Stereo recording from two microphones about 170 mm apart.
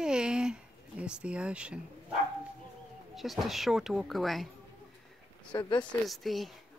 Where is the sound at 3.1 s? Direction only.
Centre (ahead or behind).